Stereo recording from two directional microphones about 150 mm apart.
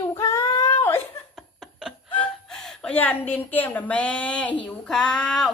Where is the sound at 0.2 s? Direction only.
20° left (ahead or behind).